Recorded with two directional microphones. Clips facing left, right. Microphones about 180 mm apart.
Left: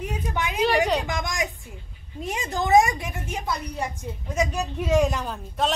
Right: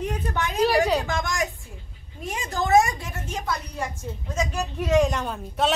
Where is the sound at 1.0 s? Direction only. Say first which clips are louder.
Right 1 dB; 15° left (ahead or behind).